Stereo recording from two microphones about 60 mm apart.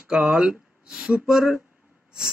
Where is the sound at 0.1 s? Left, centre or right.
Centre.